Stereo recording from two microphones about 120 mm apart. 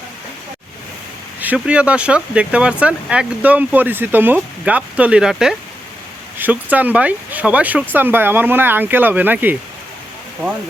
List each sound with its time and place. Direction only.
1.4 s speech: 10° right (ahead or behind)